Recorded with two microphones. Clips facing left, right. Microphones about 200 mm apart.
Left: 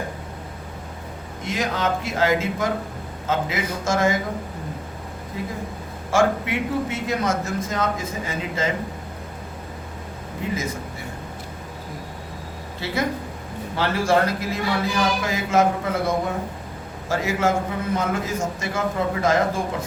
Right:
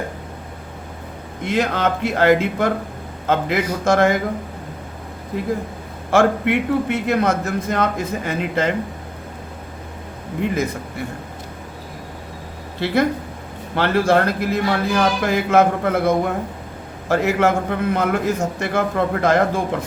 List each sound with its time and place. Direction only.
1.5 s a man's voice: 60° right (ahead or behind)
6.1 s a man's voice: 60° right (ahead or behind)
10.5 s a man's voice: 60° right (ahead or behind)
12.8 s a man's voice: 60° right (ahead or behind)